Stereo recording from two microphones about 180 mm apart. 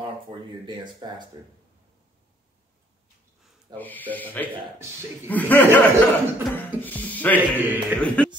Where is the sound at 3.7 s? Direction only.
10° left (ahead or behind).